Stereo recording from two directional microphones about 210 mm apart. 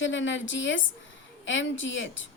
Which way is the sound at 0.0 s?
60° left (ahead or behind).